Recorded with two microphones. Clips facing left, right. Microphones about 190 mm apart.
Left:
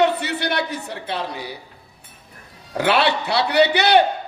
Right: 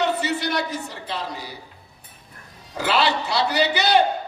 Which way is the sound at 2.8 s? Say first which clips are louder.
Left 3 dB; 65° left (ahead or behind).